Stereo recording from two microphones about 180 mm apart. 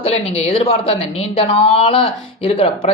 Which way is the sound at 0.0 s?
35° left (ahead or behind).